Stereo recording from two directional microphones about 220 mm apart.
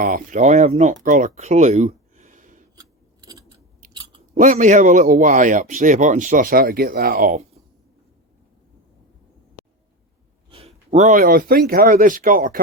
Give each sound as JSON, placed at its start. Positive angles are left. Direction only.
{"t": 0.0, "sound": "speech", "side_deg": -40}
{"t": 1.0, "sound": "a sound", "side_deg": -30}
{"t": 2.7, "sound": "filing", "side_deg": -15}
{"t": 4.4, "sound": "speech", "side_deg": -35}
{"t": 10.5, "sound": "speech", "side_deg": -30}